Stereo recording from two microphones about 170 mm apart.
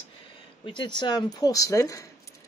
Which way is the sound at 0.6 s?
30° left (ahead or behind).